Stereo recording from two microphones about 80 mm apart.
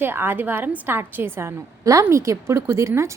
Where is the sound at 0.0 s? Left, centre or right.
Right.